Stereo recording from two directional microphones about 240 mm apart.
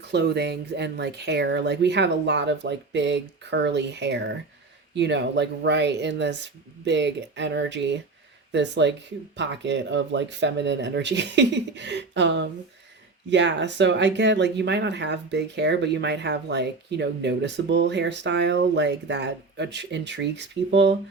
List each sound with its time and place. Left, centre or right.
0.1 s speech: right